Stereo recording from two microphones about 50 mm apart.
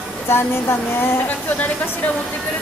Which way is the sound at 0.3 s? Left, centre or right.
Left.